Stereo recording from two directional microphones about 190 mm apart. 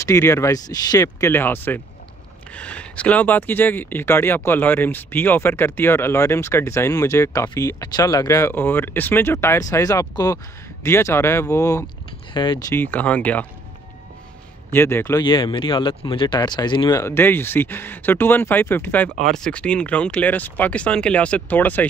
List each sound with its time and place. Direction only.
0.0 s speech: 15° left (ahead or behind)
14.7 s speech: 10° left (ahead or behind)
15.2 s speech: 25° left (ahead or behind); by 21.8 s 10° left (ahead or behind)